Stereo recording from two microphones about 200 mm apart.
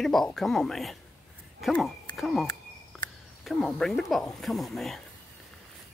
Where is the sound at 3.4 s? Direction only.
Centre (ahead or behind).